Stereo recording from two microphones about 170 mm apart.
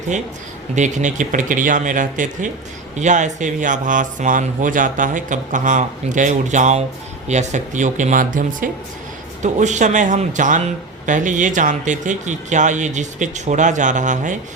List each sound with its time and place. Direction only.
0.8 s speech: 45° right (ahead or behind)